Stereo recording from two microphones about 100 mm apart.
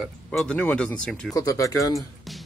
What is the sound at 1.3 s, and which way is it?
Speech, 35° left (ahead or behind).